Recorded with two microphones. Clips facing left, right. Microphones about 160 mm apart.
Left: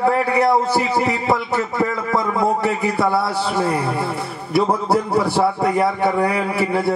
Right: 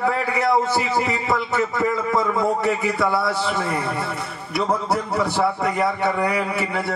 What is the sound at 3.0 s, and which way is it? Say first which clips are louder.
A man's voice: left 2 dB; 30° left (ahead or behind).